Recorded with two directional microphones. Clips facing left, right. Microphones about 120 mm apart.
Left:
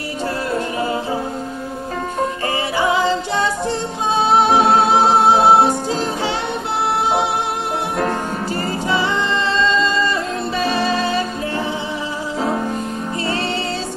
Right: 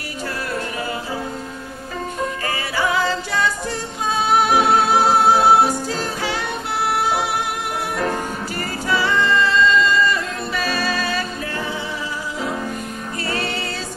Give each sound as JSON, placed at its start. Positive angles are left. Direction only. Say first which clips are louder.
{"t": 0.5, "sound": "music", "louder": "left 6 dB", "side_deg": 25}
{"t": 2.4, "sound": "music", "louder": "left 3 dB", "side_deg": 25}
{"t": 8.8, "sound": "a capella", "louder": "right 2 dB", "side_deg": 20}